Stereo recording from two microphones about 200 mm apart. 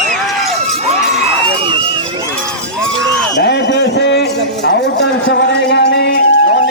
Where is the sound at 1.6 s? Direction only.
25° right (ahead or behind).